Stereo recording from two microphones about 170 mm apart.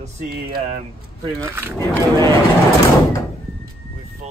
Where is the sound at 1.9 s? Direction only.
15° left (ahead or behind).